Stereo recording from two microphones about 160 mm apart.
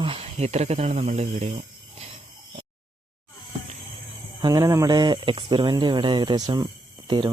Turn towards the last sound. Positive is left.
turn(degrees=-30)  # may be behind; listen again after turning